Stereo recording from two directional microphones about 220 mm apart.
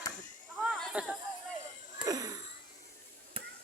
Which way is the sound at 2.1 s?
15° right (ahead or behind).